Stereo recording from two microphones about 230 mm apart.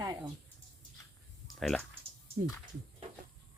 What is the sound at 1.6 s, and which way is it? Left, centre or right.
Speech, centre.